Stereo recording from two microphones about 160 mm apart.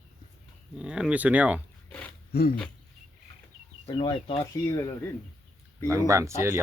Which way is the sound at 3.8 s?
35° left (ahead or behind).